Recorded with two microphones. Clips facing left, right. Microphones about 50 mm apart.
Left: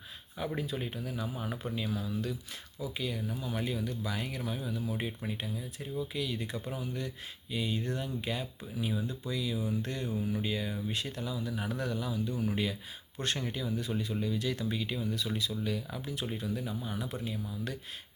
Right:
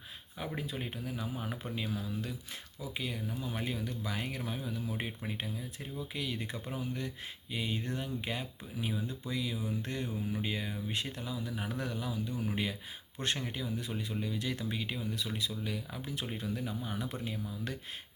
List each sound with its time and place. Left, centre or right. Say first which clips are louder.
0.3 s speech: left 4 dB; centre
2.9 s speech: left 1 dB; right
16.3 s speech: left 1 dB; right